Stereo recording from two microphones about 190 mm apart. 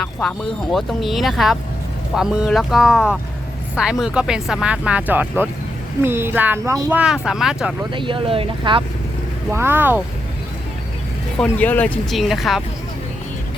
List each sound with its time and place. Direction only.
0.0 s speech: 5° left (ahead or behind)
7.9 s speech: 25° right (ahead or behind)
9.5 s speech: 10° right (ahead or behind)
11.3 s speech: 10° left (ahead or behind)